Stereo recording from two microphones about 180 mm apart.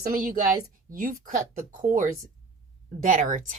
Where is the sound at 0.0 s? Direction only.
50° right (ahead or behind).